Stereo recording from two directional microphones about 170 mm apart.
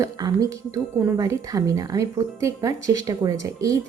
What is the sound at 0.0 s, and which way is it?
Speech, 20° right (ahead or behind).